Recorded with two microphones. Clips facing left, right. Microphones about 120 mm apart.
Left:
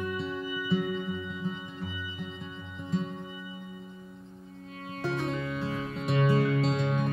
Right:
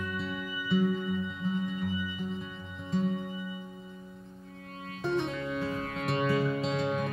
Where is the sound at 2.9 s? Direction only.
Centre (ahead or behind).